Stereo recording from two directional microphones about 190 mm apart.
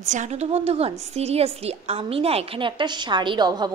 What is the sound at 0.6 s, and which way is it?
A woman's voice, 30° right (ahead or behind).